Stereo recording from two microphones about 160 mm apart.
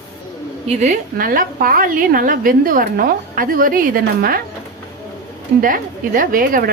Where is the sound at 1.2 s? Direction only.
65° right (ahead or behind).